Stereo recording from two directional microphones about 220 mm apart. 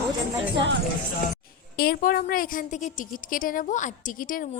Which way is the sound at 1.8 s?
40° left (ahead or behind).